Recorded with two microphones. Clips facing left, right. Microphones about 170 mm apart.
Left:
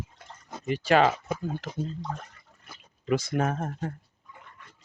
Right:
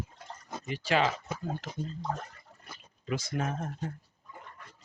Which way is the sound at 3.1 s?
55° left (ahead or behind).